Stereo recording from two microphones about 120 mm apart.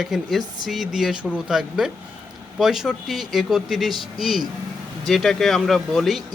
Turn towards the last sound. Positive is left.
turn(degrees=0)  # may be behind; listen again after turning